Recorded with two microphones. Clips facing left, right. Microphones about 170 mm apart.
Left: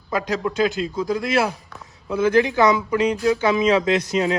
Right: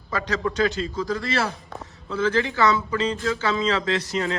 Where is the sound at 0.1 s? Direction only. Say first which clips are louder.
Left 3 dB; 10° left (ahead or behind).